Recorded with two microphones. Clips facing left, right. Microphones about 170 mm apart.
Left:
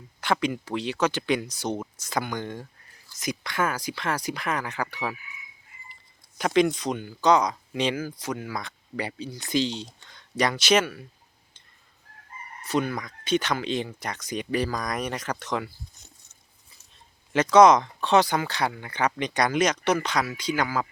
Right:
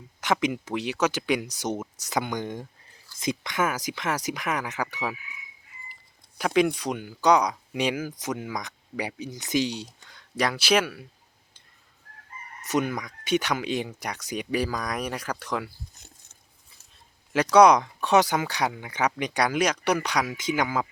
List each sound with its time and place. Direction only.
0.2 s speech: 15° right (ahead or behind)
6.3 s speech: 5° right (ahead or behind)
12.6 s speech: 15° right (ahead or behind)
17.3 s speech: 10° right (ahead or behind)